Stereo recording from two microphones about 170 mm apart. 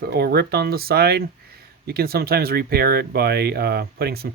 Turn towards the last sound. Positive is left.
turn(degrees=-65)  # may be behind; listen again after turning